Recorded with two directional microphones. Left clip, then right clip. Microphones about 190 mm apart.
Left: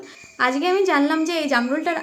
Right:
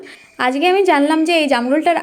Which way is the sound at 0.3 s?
25° right (ahead or behind).